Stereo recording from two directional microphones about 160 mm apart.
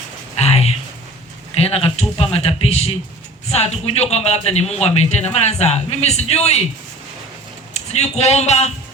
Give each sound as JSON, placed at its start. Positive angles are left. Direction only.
{"t": 0.3, "sound": "a sound", "side_deg": 40}
{"t": 1.5, "sound": "a man's voice", "side_deg": 40}
{"t": 7.7, "sound": "speech", "side_deg": 45}